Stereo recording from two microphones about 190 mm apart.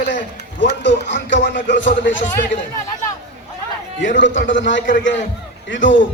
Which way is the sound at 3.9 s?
75° left (ahead or behind).